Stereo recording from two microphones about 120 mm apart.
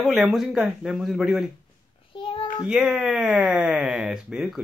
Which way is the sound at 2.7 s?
5° right (ahead or behind).